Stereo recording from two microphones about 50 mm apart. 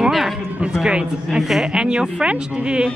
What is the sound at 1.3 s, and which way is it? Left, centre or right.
Speech, centre.